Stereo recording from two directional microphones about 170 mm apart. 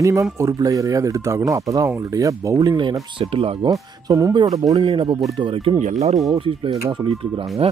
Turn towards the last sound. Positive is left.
turn(degrees=-15)  # may be behind; listen again after turning